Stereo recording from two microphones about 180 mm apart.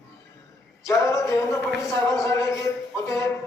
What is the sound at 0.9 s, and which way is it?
A man's voice, 15° left (ahead or behind).